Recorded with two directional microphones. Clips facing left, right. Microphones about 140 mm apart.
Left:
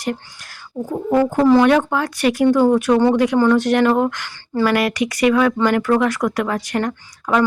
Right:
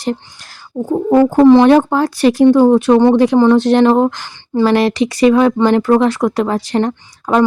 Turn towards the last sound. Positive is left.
turn(degrees=-30)  # may be behind; listen again after turning